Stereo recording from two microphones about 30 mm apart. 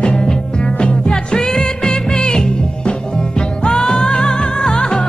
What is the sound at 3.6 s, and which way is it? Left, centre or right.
Music, centre.